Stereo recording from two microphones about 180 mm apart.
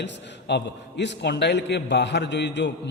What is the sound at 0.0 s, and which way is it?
A man's voice, 70° left (ahead or behind).